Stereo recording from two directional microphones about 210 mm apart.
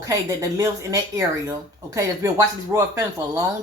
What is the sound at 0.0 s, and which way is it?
Speech, 15° right (ahead or behind).